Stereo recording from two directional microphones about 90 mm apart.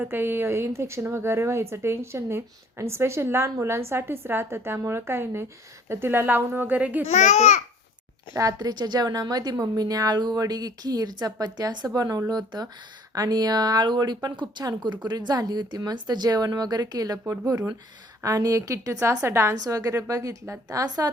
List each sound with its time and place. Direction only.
0.0 s a woman's voice: 25° right (ahead or behind)
8.4 s a woman's voice: 40° right (ahead or behind)